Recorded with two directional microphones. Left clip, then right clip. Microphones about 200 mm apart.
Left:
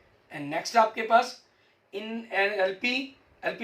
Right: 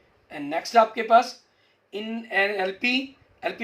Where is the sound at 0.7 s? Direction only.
55° right (ahead or behind).